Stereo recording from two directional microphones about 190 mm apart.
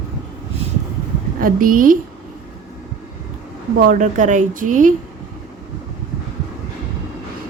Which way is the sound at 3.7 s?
45° right (ahead or behind).